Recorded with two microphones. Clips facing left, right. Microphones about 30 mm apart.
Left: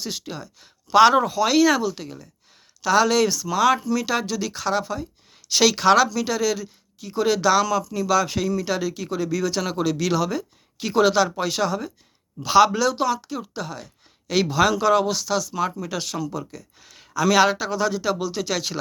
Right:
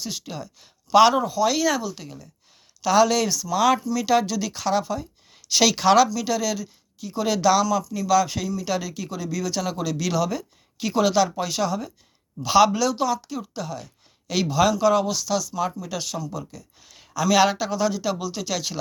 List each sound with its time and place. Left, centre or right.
0.0 s speech: left
0.3 s speech: centre
1.1 s speech: left
2.8 s speech: centre
6.1 s speech: left
7.6 s speech: left
11.4 s speech: left
12.5 s speech: centre
12.9 s speech: left
16.8 s a sound: centre
17.3 s speech: centre